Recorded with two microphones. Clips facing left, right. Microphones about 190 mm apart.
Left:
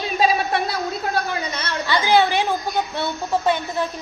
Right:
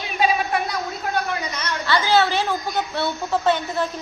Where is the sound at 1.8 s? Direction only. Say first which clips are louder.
Left 1 dB; 15° left (ahead or behind).